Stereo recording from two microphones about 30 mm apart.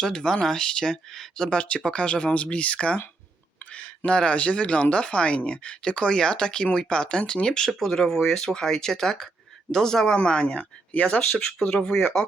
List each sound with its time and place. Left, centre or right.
0.0 s speech: centre; by 3.0 s left
3.7 s a sound: left
4.4 s speech: left; by 8.4 s centre
8.4 s speech: left
10.2 s speech: left
11.3 s speech: centre